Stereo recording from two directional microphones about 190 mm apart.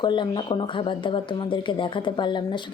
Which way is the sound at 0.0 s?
25° left (ahead or behind).